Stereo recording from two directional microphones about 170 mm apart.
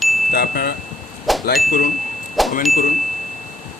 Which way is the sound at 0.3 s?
65° left (ahead or behind).